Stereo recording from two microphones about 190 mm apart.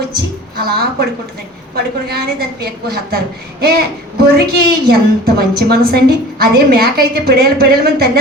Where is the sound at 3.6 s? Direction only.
55° right (ahead or behind).